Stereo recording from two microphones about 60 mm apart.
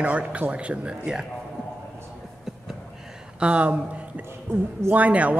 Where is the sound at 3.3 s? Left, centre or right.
Centre.